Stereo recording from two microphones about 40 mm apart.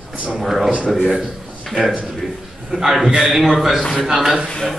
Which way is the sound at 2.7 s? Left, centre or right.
Centre.